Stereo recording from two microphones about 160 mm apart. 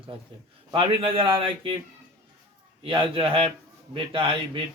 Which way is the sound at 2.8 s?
35° right (ahead or behind).